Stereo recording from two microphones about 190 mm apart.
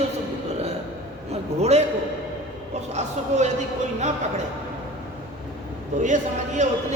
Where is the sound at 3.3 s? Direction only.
40° right (ahead or behind).